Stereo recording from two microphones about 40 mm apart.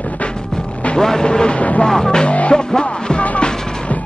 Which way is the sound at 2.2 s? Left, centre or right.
Left.